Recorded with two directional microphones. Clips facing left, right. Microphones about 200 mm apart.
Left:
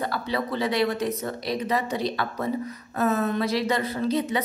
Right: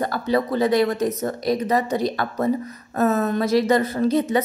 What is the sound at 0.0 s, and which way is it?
A woman's voice, 45° right (ahead or behind).